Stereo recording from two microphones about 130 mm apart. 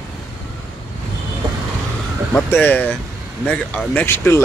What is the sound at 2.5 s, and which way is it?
Speech, 15° left (ahead or behind).